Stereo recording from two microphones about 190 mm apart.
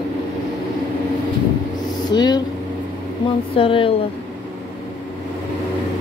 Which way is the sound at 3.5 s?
30° left (ahead or behind).